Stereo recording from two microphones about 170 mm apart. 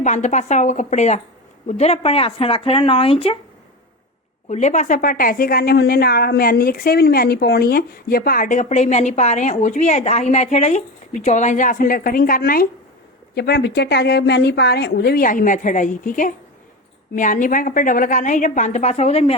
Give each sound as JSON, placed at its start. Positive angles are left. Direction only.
{"t": 0.0, "sound": "a woman's voice", "side_deg": 45}
{"t": 4.4, "sound": "a woman's voice", "side_deg": 45}
{"t": 13.3, "sound": "a woman's voice", "side_deg": 70}